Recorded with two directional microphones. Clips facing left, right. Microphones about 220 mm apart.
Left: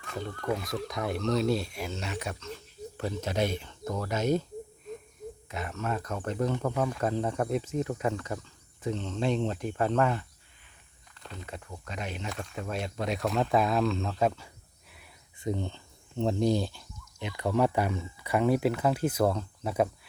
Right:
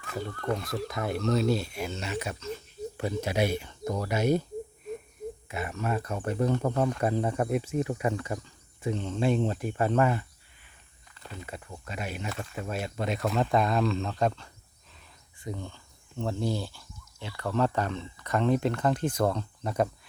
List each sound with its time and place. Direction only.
0.4 s speech: centre (ahead or behind)
5.5 s speech: 10° right (ahead or behind)
15.4 s speech: 25° left (ahead or behind); by 19.9 s 5° left (ahead or behind)